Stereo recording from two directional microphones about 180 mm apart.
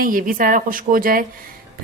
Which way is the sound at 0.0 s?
50° right (ahead or behind).